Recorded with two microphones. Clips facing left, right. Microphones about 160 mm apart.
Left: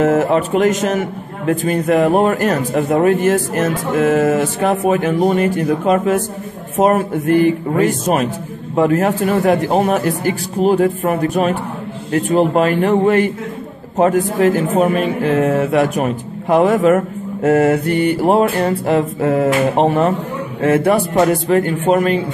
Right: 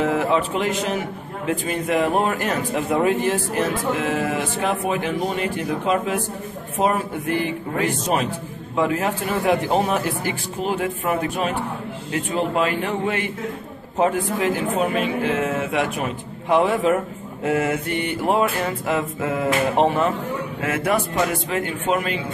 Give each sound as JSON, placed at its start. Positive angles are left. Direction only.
{"t": 0.0, "sound": "speech", "side_deg": 45}
{"t": 2.9, "sound": "speech", "side_deg": 60}
{"t": 20.6, "sound": "speech", "side_deg": 30}